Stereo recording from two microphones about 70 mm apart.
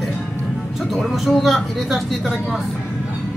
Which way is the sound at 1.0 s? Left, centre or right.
Centre.